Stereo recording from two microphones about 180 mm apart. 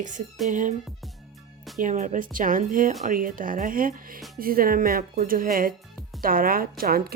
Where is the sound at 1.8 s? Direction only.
45° right (ahead or behind).